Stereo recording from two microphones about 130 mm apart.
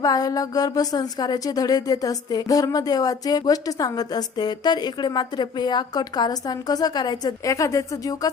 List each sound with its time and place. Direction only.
0.0 s speech: 30° left (ahead or behind)